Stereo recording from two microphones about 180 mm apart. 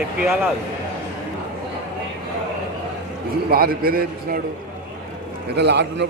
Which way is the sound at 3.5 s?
55° right (ahead or behind).